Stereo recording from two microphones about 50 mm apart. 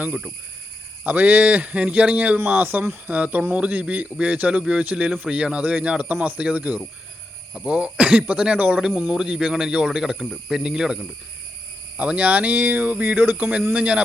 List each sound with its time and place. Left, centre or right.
1.0 s speech: right
9.0 s speech: centre
11.9 s speech: right
13.3 s speech: right